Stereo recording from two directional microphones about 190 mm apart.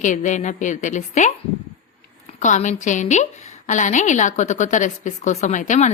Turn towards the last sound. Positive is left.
turn(degrees=40)  # may be behind; listen again after turning